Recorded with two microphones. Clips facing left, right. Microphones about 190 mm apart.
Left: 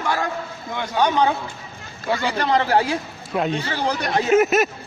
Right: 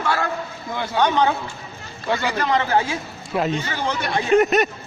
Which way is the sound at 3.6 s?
35° left (ahead or behind).